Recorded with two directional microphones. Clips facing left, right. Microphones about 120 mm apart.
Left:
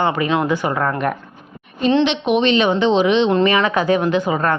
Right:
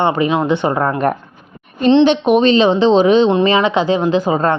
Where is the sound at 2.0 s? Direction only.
40° right (ahead or behind).